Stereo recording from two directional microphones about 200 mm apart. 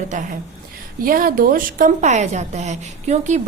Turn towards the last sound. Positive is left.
turn(degrees=-35)  # may be behind; listen again after turning